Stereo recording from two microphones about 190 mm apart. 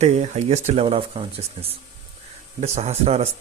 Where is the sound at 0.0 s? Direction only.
35° right (ahead or behind).